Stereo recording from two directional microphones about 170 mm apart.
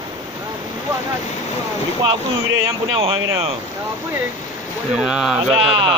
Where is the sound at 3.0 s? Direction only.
35° right (ahead or behind).